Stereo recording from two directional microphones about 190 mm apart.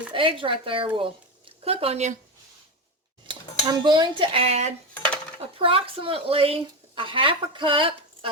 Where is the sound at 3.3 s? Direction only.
25° right (ahead or behind).